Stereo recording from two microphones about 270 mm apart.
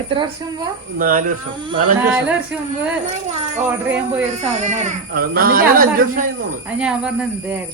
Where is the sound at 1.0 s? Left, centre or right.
Right.